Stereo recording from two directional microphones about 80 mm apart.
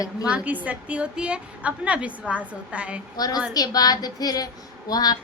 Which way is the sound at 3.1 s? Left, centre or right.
Left.